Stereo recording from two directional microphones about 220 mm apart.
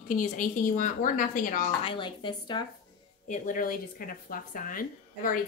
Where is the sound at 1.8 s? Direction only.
20° left (ahead or behind).